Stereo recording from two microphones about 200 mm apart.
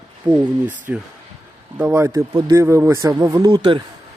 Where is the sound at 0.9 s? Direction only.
10° right (ahead or behind).